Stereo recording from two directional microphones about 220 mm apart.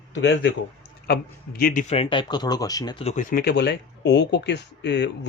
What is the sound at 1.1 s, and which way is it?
Speech, 40° left (ahead or behind).